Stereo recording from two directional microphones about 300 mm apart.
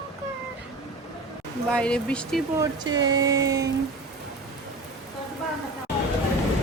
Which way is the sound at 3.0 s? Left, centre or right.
Centre.